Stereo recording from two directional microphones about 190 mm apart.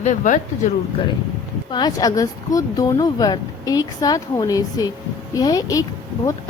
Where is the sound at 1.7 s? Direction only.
20° left (ahead or behind).